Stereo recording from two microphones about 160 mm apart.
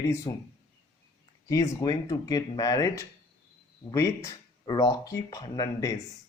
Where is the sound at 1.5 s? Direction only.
20° left (ahead or behind).